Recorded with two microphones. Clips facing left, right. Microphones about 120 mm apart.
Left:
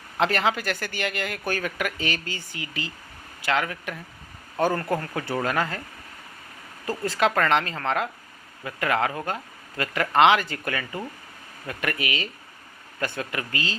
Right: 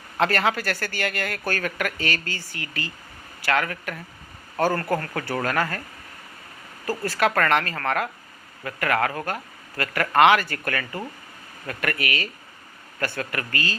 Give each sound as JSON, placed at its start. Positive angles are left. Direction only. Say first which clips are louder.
{"t": 0.2, "sound": "speech", "louder": "right 1 dB", "side_deg": 20}
{"t": 7.0, "sound": "speech", "louder": "even", "side_deg": 20}